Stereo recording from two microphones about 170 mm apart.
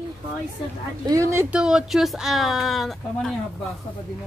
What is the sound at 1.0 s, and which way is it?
Speech, 20° right (ahead or behind).